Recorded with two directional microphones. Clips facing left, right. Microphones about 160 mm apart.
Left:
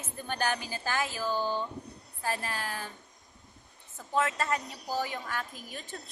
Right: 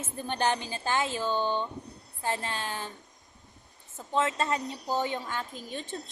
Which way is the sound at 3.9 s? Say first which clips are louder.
Right 2 dB; 25° right (ahead or behind).